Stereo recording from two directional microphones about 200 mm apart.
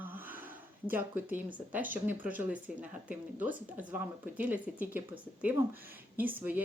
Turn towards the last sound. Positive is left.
turn(degrees=-10)  # may be behind; listen again after turning